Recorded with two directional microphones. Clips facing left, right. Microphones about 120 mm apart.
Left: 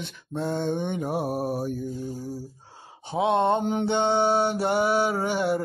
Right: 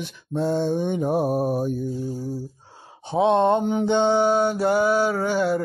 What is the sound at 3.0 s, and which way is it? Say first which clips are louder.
Speech: right 4 dB; 20° right (ahead or behind).